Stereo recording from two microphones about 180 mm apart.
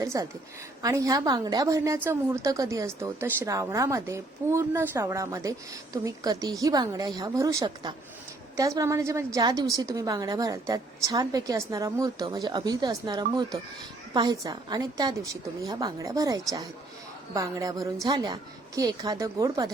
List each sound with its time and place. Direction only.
0.0 s a woman's voice: 15° right (ahead or behind)